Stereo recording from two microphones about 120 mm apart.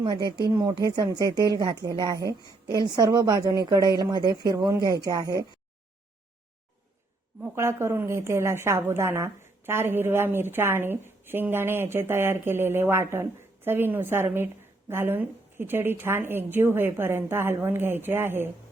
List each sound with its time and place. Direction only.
0.0 s speech: 40° right (ahead or behind)
7.4 s a woman's voice: 20° right (ahead or behind)